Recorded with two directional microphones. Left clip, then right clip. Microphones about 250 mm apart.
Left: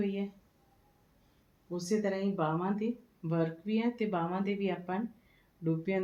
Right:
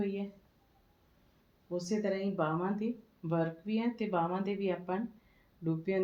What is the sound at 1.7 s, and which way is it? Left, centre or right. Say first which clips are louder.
Speech: left 1 dB; centre.